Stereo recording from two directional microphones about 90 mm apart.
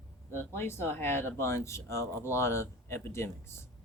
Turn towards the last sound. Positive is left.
turn(degrees=30)  # may be behind; listen again after turning